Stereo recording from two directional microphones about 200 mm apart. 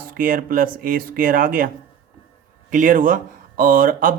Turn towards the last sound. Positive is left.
turn(degrees=-45)  # may be behind; listen again after turning